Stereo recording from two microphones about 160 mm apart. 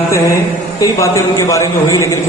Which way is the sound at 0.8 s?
20° left (ahead or behind).